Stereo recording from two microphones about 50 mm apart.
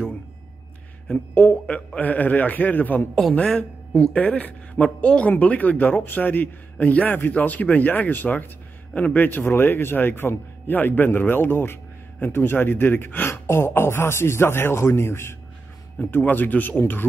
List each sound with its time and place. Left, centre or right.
1.0 s speech: left
3.9 s speech: left
13.3 s speech: left
16.0 s speech: left